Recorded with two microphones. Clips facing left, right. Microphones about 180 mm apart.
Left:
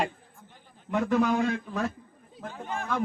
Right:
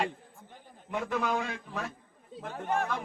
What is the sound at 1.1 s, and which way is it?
Speech, 45° left (ahead or behind).